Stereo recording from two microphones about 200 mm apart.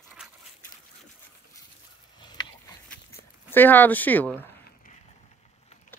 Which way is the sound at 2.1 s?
25° left (ahead or behind).